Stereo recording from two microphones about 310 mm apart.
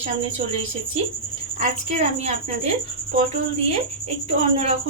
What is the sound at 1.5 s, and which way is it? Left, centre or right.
Speech, right.